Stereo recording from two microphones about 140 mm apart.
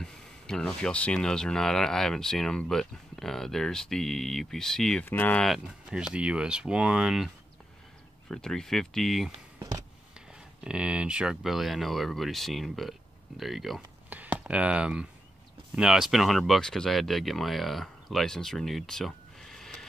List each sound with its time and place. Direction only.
0.0 s speech: 5° left (ahead or behind)
5.6 s speech: 5° right (ahead or behind)
8.3 s speech: 5° left (ahead or behind)
9.6 s a sound: 20° right (ahead or behind)
10.6 s speech: 5° right (ahead or behind)